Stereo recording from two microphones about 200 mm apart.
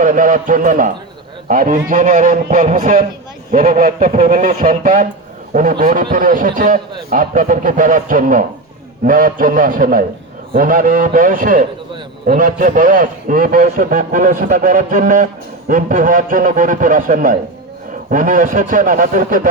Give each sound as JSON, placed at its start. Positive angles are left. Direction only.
{"t": 0.0, "sound": "a man's voice", "side_deg": -40}